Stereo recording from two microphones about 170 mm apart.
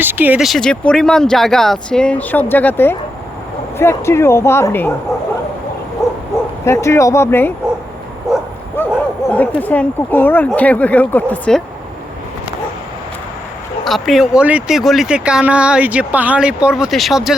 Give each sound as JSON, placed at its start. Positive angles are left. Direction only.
{"t": 0.0, "sound": "speech", "side_deg": -10}
{"t": 6.0, "sound": "bow-wow", "side_deg": 15}
{"t": 6.7, "sound": "speech", "side_deg": 15}
{"t": 8.3, "sound": "bow-wow", "side_deg": 0}
{"t": 8.8, "sound": "a sound", "side_deg": 10}
{"t": 9.3, "sound": "speech", "side_deg": 10}
{"t": 13.8, "sound": "speech", "side_deg": 0}